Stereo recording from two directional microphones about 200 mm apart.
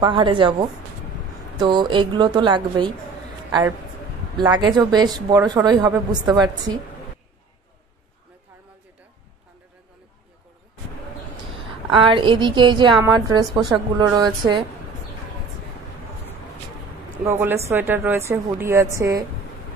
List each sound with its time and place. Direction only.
0.0 s a woman's voice: 25° right (ahead or behind)
4.4 s a woman's voice: 20° right (ahead or behind)
11.9 s a woman's voice: 25° right (ahead or behind)
17.2 s speech: 10° right (ahead or behind)